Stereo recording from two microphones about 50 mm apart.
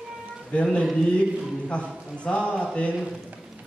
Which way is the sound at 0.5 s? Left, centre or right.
Left.